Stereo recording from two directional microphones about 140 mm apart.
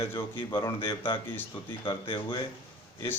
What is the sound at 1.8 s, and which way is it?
Speech, 35° left (ahead or behind).